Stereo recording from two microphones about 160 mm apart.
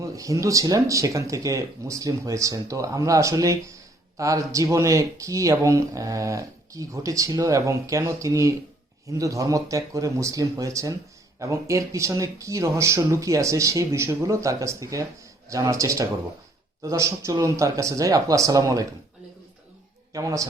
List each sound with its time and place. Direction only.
0.0 s speech: 20° right (ahead or behind)
20.1 s speech: 20° right (ahead or behind)